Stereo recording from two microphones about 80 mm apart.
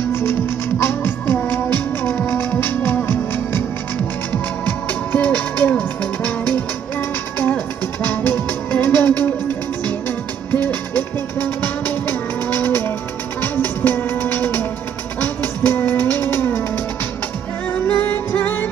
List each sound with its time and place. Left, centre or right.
0.1 s music: left
8.0 s music: left
10.5 s music: left
17.7 s music: centre